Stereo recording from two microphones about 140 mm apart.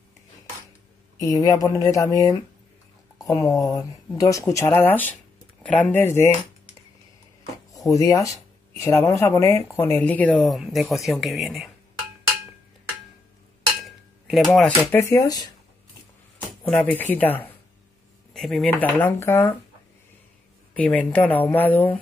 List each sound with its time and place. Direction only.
1.1 s speech: 25° left (ahead or behind)
7.7 s speech: 25° left (ahead or behind); by 11.7 s centre (ahead or behind)
13.7 s dishes: centre (ahead or behind)
14.9 s speech: 20° left (ahead or behind)
16.3 s speech: 10° left (ahead or behind)
18.3 s speech: centre (ahead or behind)
18.8 s speech: 15° left (ahead or behind)
20.7 s speech: 10° left (ahead or behind)